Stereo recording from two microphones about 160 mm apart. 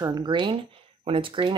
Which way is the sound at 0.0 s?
25° right (ahead or behind).